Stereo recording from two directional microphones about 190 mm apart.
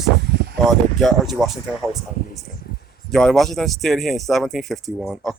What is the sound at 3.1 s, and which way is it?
Speech, centre (ahead or behind).